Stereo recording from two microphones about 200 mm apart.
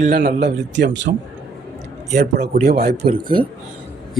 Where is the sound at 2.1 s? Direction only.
55° right (ahead or behind).